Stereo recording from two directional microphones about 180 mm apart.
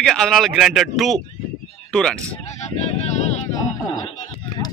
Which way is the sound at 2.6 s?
40° left (ahead or behind).